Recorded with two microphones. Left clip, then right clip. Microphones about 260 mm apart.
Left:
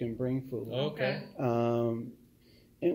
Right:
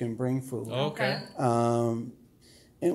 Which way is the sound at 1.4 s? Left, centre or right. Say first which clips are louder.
Right 4 dB; right.